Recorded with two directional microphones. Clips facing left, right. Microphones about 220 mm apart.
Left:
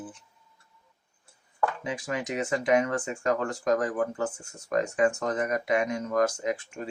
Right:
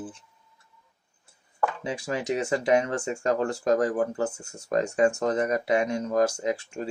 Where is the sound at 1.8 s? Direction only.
30° right (ahead or behind).